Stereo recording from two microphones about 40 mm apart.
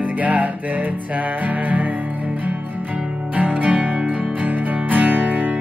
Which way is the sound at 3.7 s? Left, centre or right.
Right.